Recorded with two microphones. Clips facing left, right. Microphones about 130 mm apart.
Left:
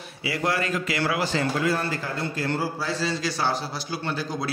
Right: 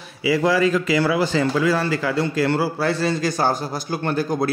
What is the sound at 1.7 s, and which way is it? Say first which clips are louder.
A man's voice: right 6 dB; 90° right.